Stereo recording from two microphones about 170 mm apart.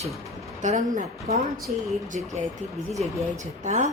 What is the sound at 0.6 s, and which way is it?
A woman's voice, 45° right (ahead or behind).